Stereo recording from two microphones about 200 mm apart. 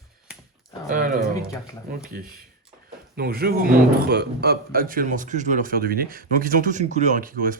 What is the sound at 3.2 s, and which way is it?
A man's voice, 50° right (ahead or behind).